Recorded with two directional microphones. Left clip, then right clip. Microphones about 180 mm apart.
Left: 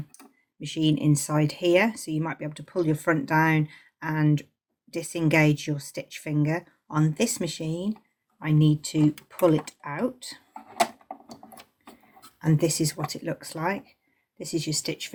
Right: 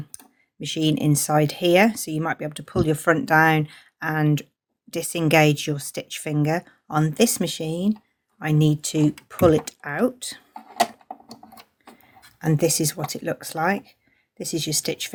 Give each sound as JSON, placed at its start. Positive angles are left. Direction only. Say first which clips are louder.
{"t": 0.1, "sound": "computer keyboard", "louder": "right 4 dB", "side_deg": -50}
{"t": 0.6, "sound": "speech", "louder": "right 2 dB", "side_deg": -50}
{"t": 12.4, "sound": "speech", "louder": "right 4 dB", "side_deg": -45}